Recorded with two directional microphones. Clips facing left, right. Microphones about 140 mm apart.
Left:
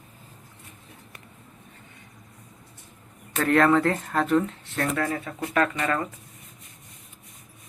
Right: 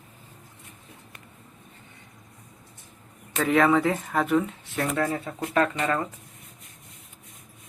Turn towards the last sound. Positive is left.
turn(degrees=-20)  # may be behind; listen again after turning